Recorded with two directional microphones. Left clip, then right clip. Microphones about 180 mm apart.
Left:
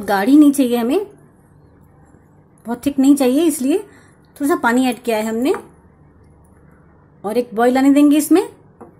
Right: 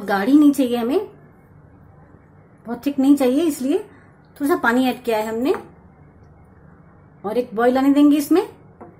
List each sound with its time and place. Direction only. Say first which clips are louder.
0.0 s a woman's voice: left 3 dB; 25° left (ahead or behind)
2.6 s a woman's voice: left 4 dB; 25° left (ahead or behind)
7.2 s speech: left 3 dB; 25° left (ahead or behind)